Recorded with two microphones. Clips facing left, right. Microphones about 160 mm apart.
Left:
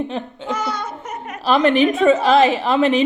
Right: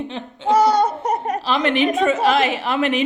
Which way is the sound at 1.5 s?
40° left (ahead or behind).